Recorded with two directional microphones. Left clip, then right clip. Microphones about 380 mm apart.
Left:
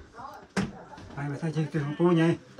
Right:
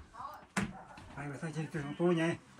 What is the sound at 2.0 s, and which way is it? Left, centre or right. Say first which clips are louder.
Speech: left 8 dB; left.